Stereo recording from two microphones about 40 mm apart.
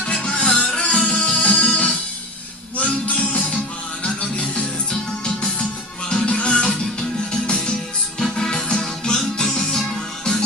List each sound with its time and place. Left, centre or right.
0.2 s music: left
1.4 s music: left
8.2 s music: centre